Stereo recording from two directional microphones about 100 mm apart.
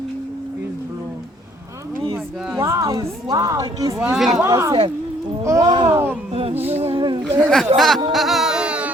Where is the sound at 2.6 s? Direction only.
30° right (ahead or behind).